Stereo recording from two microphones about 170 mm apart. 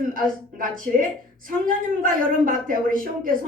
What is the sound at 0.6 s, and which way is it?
A woman's voice, 50° right (ahead or behind).